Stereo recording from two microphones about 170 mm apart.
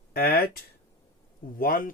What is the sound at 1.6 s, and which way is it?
Speech, 55° left (ahead or behind).